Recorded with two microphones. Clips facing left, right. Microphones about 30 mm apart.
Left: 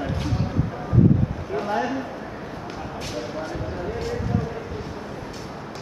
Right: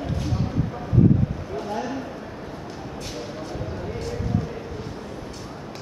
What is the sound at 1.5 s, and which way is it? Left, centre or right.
Speech, left.